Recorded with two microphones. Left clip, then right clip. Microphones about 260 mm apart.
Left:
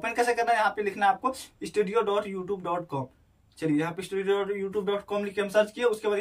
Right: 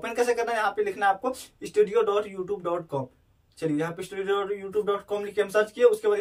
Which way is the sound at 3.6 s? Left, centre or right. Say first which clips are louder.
Even; centre.